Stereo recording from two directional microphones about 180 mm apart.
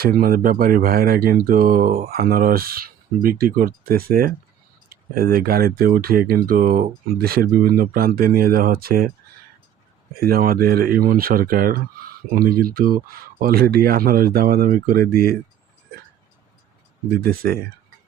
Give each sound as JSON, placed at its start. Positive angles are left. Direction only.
{"t": 0.0, "sound": "speech", "side_deg": -55}
{"t": 10.2, "sound": "speech", "side_deg": -55}
{"t": 17.2, "sound": "speech", "side_deg": -55}